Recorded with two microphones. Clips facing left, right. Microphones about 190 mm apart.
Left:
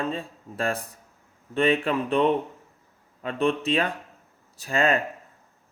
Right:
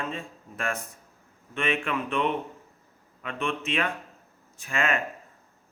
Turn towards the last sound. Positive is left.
turn(degrees=35)  # may be behind; listen again after turning